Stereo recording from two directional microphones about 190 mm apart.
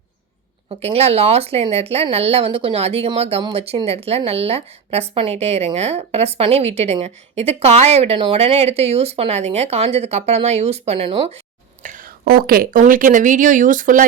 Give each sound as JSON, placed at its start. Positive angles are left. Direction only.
{"t": 0.7, "sound": "speech", "side_deg": -30}
{"t": 11.8, "sound": "speech", "side_deg": -45}